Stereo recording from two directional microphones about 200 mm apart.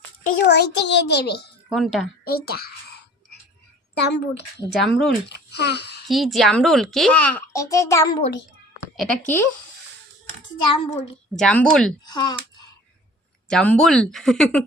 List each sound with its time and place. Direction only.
0.3 s a child's voice: 55° left (ahead or behind)
1.7 s a child's voice: centre (ahead or behind)
2.2 s a sound: 50° left (ahead or behind)
3.9 s a child's voice: 55° left (ahead or behind)
4.7 s a child's voice: centre (ahead or behind)
5.3 s a child's voice: 55° left (ahead or behind)
6.1 s a child's voice: centre (ahead or behind)
10.7 s a child's voice: 30° left (ahead or behind)
11.3 s a child's voice: 5° left (ahead or behind)
12.0 s speech: 20° left (ahead or behind)
13.5 s a child's voice: 5° left (ahead or behind)